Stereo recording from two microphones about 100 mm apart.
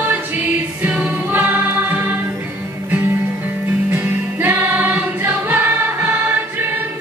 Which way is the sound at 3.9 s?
20° right (ahead or behind).